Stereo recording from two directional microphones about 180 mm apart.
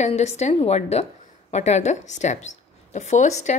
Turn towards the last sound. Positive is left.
turn(degrees=40)  # may be behind; listen again after turning